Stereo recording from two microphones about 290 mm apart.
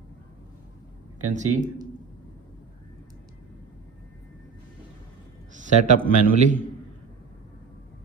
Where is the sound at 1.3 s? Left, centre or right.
Right.